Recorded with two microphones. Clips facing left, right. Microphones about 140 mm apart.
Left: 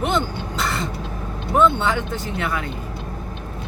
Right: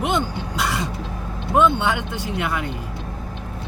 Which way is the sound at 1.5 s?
15° right (ahead or behind).